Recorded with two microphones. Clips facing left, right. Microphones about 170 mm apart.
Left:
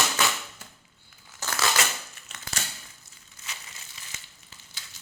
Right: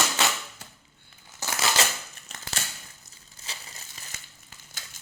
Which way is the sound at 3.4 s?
35° right (ahead or behind).